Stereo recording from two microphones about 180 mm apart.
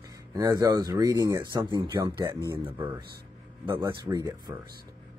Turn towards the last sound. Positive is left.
turn(degrees=-15)  # may be behind; listen again after turning